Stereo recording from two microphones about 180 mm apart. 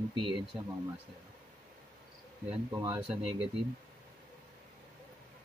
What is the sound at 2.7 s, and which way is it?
Speech, 20° right (ahead or behind).